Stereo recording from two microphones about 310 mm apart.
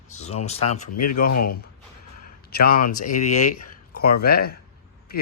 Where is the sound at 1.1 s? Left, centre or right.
Left.